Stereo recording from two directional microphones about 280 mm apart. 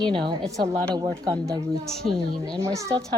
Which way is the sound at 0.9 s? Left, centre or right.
Centre.